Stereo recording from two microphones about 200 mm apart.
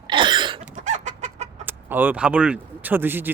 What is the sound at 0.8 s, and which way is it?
Chicken, 35° right (ahead or behind).